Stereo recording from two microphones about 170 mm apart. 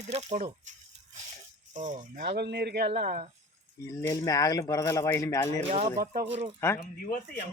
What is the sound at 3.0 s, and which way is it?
Speech, 45° right (ahead or behind).